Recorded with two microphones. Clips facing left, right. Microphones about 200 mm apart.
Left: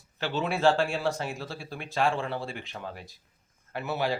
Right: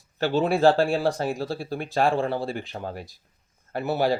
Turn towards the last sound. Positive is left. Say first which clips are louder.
# right 6 dB
turn(degrees=-35)  # may be behind; listen again after turning